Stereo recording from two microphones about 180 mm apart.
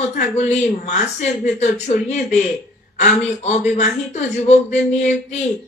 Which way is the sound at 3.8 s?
40° left (ahead or behind).